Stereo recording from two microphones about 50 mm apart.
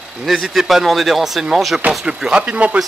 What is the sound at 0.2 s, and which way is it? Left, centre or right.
Speech, centre.